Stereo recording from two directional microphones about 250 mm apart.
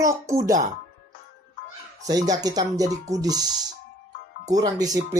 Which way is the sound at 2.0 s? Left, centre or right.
Centre.